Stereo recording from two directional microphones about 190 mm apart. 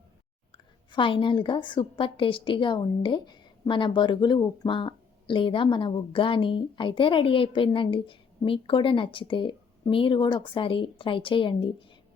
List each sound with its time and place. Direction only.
0.5 s a woman's voice: 25° left (ahead or behind)